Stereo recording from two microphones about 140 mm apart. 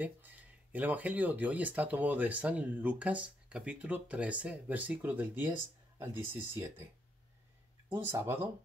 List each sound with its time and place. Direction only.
0.0 s speech: 10° right (ahead or behind)
7.9 s speech: 15° right (ahead or behind)